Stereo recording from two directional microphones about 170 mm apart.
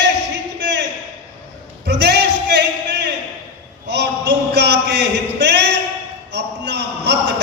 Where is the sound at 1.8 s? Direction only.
80° right.